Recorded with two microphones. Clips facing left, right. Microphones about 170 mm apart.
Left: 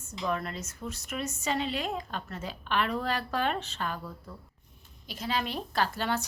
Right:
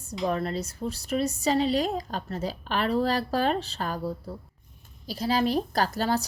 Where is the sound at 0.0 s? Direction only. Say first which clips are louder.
Right 5 dB; 35° right (ahead or behind).